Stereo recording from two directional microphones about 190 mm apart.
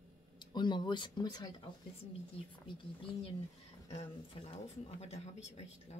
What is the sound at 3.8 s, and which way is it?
Speech, 35° left (ahead or behind).